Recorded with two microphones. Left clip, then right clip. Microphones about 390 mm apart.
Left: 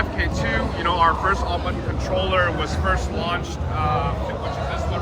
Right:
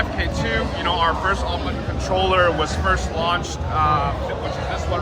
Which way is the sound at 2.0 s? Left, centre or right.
Centre.